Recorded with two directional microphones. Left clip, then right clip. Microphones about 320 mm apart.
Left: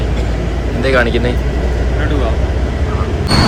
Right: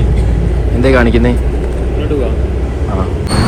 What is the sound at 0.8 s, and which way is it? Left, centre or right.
Speech, centre.